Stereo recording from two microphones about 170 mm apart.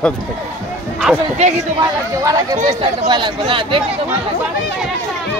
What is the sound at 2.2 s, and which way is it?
Speech, 20° right (ahead or behind).